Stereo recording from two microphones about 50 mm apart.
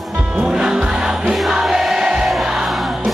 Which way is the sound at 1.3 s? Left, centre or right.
Centre.